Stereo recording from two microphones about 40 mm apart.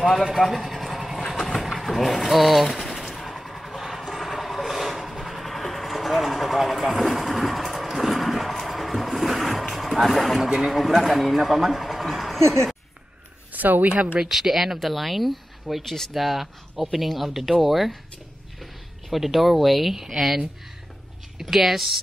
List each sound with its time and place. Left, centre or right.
0.5 s vehicle: centre
1.6 s speech: centre
3.3 s vehicle: centre
13.5 s speech: right
13.9 s speech: right
14.2 s speech: centre